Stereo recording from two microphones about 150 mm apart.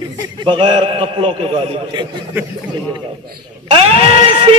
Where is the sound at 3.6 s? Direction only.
40° right (ahead or behind).